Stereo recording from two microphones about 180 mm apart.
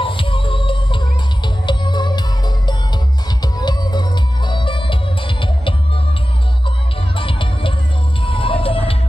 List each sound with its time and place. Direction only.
0.0 s music: 30° left (ahead or behind)
7.2 s music: 30° left (ahead or behind)